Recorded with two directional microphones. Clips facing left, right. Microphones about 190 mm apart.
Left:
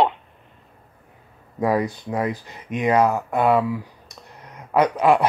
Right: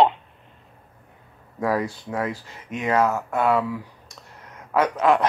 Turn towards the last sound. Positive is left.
turn(degrees=10)  # may be behind; listen again after turning